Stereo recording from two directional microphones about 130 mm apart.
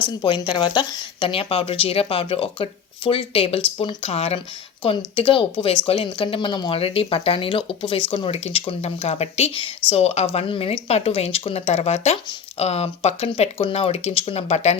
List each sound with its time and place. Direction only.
0.2 s speech: 35° left (ahead or behind); by 10.2 s 55° left (ahead or behind)
10.2 s speech: 40° left (ahead or behind); by 14.8 s 55° left (ahead or behind)